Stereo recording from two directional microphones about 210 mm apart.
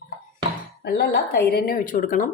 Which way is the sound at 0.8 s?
50° left (ahead or behind).